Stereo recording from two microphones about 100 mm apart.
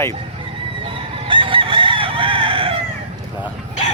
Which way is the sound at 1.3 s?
60° right (ahead or behind).